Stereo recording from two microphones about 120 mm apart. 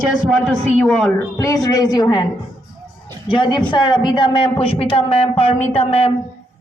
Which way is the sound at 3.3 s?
40° left (ahead or behind).